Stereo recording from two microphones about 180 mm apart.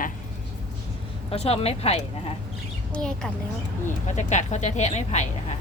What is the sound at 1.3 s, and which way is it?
Speech, 35° left (ahead or behind).